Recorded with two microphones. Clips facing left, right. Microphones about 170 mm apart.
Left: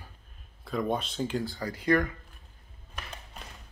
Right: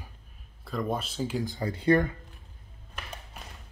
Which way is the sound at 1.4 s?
25° right (ahead or behind).